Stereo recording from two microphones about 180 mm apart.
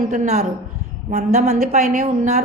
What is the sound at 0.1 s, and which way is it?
A woman's voice, 40° right (ahead or behind).